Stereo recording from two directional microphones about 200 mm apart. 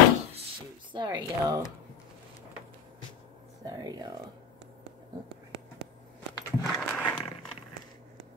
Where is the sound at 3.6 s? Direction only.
20° right (ahead or behind).